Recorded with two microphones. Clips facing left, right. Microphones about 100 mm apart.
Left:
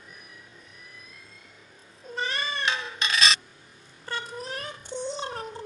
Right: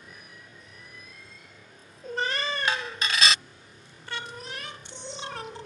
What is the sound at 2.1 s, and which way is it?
Cat, 50° right (ahead or behind).